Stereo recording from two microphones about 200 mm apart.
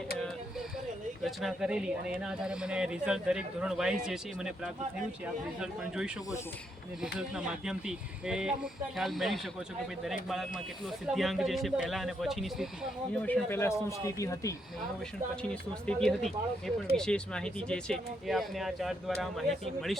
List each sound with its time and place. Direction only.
1.2 s speech: centre (ahead or behind)
13.2 s speech: 10° left (ahead or behind)
15.4 s speech: 5° left (ahead or behind)